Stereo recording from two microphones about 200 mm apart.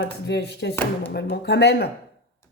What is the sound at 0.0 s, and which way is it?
Speech, 55° left (ahead or behind).